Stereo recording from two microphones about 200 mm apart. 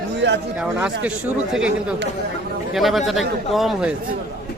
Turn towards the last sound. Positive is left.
turn(degrees=0)  # may be behind; listen again after turning